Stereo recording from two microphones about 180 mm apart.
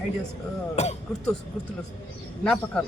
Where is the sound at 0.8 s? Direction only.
40° left (ahead or behind).